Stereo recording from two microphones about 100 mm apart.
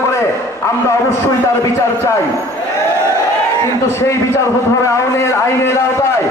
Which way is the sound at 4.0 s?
30° left (ahead or behind).